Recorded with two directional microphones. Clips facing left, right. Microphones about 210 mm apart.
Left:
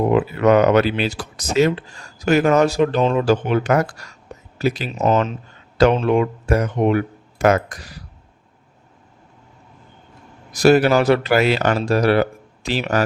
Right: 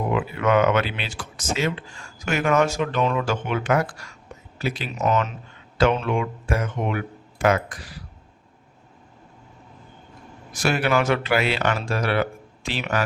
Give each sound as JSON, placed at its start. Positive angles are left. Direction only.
{"t": 0.1, "sound": "speech", "side_deg": 40}
{"t": 10.5, "sound": "speech", "side_deg": 40}